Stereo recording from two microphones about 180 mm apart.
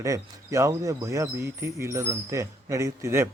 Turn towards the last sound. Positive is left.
turn(degrees=-15)  # may be behind; listen again after turning